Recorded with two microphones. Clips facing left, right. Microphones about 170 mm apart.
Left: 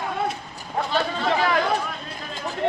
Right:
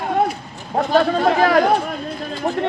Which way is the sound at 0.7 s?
50° right (ahead or behind).